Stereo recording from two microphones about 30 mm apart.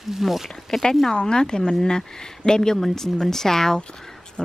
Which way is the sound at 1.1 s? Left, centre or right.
Left.